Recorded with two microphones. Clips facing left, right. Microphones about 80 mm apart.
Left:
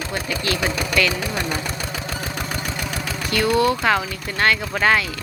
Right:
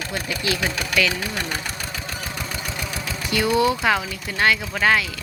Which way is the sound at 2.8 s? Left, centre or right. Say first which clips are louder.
Left 2 dB; left.